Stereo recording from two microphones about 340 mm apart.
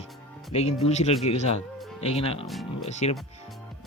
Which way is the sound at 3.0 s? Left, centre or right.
Centre.